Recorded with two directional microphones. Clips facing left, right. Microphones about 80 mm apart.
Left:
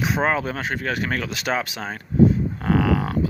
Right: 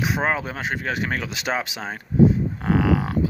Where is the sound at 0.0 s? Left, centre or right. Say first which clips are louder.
Left 2 dB; centre.